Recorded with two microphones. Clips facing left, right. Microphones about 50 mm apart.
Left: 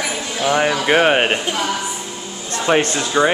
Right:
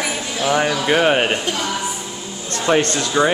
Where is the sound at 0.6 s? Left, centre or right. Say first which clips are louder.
Left 3 dB; left.